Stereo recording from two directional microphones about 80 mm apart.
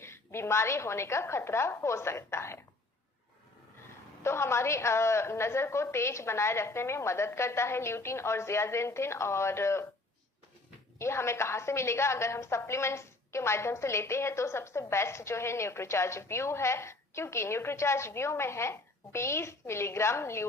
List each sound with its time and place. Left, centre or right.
0.0 s a woman's voice: left
4.2 s a woman's voice: left
10.9 s a woman's voice: left